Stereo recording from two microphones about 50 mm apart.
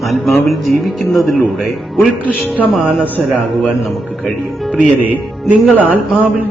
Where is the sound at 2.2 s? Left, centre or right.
Left.